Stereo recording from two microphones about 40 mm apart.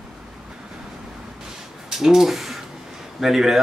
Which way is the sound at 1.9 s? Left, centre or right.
Centre.